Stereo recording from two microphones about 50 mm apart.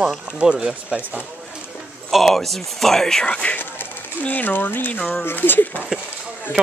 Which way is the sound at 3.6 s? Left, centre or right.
Left.